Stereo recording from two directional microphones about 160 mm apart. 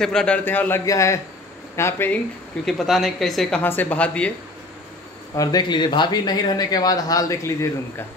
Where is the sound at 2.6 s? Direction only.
Centre (ahead or behind).